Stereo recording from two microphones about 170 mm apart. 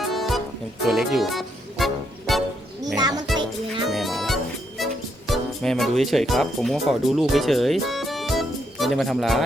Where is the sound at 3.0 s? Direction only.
25° right (ahead or behind).